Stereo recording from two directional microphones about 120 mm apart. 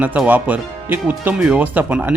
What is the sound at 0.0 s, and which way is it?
Speech, 10° right (ahead or behind).